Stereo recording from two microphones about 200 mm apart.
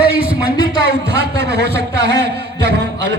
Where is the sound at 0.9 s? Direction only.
55° right (ahead or behind).